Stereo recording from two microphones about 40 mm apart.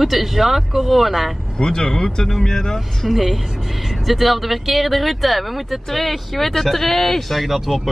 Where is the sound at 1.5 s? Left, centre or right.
Centre.